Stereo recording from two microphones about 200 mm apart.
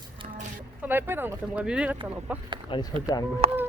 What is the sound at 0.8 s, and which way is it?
Speech, 10° right (ahead or behind).